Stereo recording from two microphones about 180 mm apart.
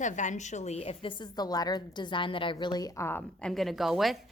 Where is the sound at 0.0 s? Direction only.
45° left (ahead or behind).